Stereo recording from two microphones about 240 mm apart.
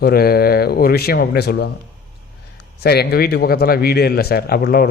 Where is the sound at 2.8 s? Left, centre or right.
Left.